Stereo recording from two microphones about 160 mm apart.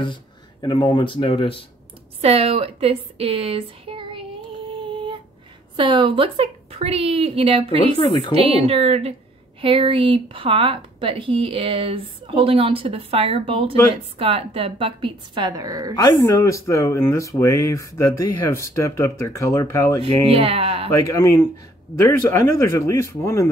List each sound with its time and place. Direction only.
0.0 s speech: 30° left (ahead or behind)
2.2 s a woman's voice: 40° right (ahead or behind)
4.7 s female singing: 30° right (ahead or behind)
5.8 s speech: 30° right (ahead or behind)
8.0 s a woman's voice: 35° left (ahead or behind)
8.3 s speech: 40° right (ahead or behind); by 15.9 s 20° right (ahead or behind)
16.0 s speech: 25° left (ahead or behind)
20.0 s speech: 35° right (ahead or behind)
20.9 s speech: 20° left (ahead or behind)